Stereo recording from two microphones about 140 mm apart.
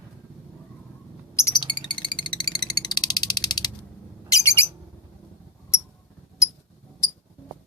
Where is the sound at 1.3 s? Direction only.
20° left (ahead or behind).